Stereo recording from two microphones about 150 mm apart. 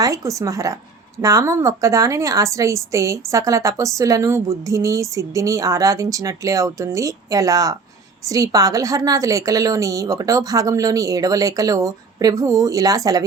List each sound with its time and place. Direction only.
0.0 s a woman's voice: 20° right (ahead or behind)